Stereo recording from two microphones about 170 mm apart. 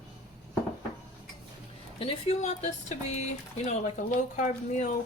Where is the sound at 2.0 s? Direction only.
35° left (ahead or behind).